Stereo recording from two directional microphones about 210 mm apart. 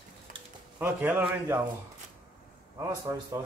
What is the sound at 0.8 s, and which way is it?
Speech, 10° right (ahead or behind).